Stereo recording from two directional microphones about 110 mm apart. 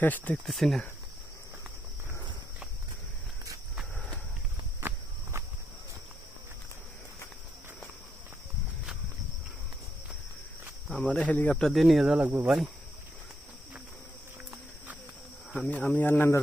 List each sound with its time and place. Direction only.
0.0 s speech: 15° left (ahead or behind)
0.4 s speech: centre (ahead or behind)
4.8 s walk: 20° right (ahead or behind)
10.9 s speech: 10° left (ahead or behind)
11.7 s speech: centre (ahead or behind)
15.5 s speech: 15° left (ahead or behind)